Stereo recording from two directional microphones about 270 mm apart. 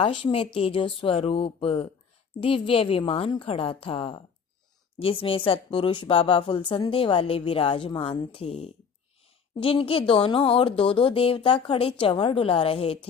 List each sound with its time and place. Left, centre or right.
0.0 s a woman's voice: centre